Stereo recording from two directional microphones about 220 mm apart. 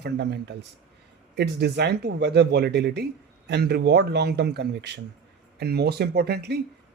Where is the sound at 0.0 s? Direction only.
50° right (ahead or behind).